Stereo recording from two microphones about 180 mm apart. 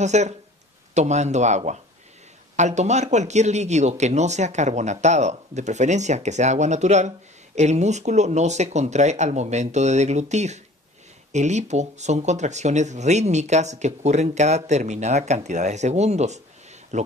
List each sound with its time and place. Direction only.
0.0 s speech: 40° right (ahead or behind)